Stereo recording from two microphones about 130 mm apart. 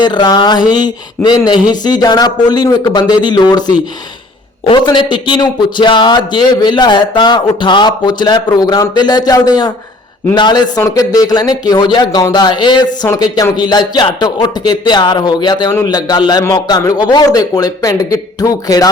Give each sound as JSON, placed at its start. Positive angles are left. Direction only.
{"t": 0.0, "sound": "a man's voice", "side_deg": 35}